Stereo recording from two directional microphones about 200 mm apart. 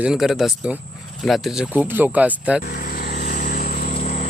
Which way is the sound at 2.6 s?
50° left (ahead or behind).